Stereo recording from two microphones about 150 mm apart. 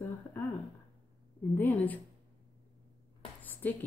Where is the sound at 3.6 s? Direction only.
10° left (ahead or behind).